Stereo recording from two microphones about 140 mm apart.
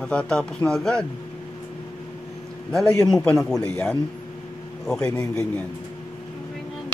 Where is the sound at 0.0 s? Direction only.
5° left (ahead or behind).